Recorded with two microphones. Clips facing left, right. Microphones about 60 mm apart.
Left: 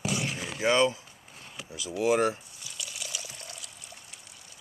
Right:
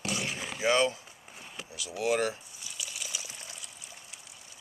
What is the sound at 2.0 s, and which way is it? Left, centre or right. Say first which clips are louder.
Speech: left 4 dB; centre.